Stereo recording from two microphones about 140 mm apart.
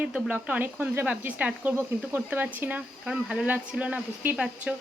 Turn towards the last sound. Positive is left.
turn(degrees=-10)  # may be behind; listen again after turning